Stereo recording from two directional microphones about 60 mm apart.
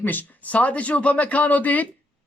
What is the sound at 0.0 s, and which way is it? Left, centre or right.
Speech, left.